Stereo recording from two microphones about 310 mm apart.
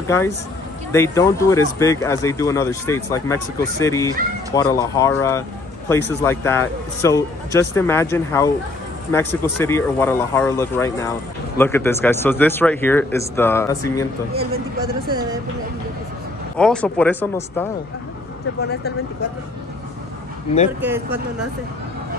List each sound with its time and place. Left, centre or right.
0.1 s speech: centre
14.3 s a man's voice: right
16.5 s speech: centre
20.8 s speech: centre